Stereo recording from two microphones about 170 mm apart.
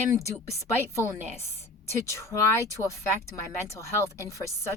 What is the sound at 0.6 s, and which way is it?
Speech, 15° left (ahead or behind).